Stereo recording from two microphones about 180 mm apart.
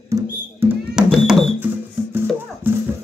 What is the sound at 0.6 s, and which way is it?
Music, 10° right (ahead or behind).